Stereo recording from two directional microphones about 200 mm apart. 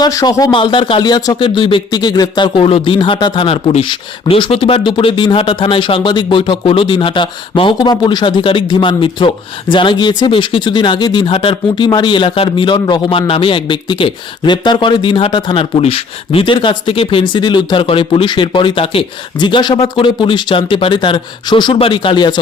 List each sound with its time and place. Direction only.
0.0 s speech: 20° left (ahead or behind)